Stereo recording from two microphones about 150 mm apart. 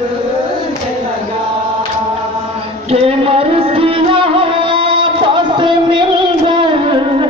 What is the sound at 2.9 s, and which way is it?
Music, 40° right (ahead or behind).